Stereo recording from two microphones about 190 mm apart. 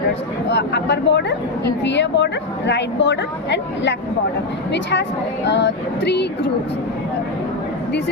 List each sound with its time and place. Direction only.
0.5 s a woman's voice: 65° left (ahead or behind)